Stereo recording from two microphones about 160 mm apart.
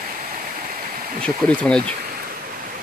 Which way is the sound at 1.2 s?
5° left (ahead or behind).